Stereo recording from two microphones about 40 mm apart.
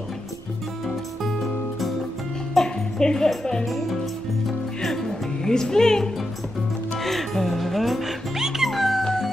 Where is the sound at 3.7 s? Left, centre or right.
Centre.